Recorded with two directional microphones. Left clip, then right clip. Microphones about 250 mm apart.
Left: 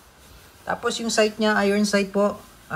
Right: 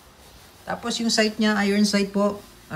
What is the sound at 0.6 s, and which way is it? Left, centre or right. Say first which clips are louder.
Speech: left 2 dB; centre.